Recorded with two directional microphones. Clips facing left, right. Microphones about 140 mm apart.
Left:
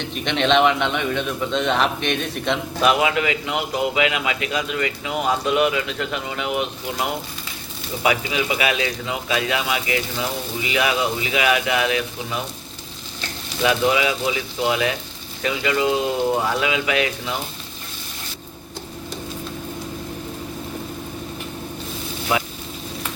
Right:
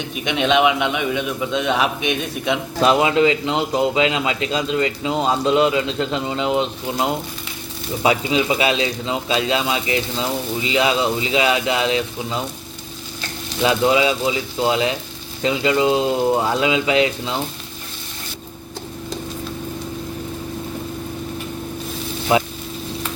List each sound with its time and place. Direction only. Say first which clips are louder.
0.0 s speech: right 1 dB; 10° right (ahead or behind)
2.8 s speech: right 4 dB; 30° right (ahead or behind)
13.6 s speech: right 3 dB; 25° right (ahead or behind)
22.3 s speech: right 5 dB; 25° right (ahead or behind)